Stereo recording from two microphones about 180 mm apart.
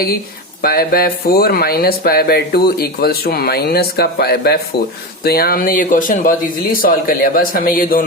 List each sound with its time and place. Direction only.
0.6 s speech: 55° left (ahead or behind)